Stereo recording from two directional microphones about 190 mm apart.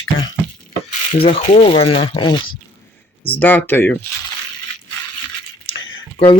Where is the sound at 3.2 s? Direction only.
10° left (ahead or behind).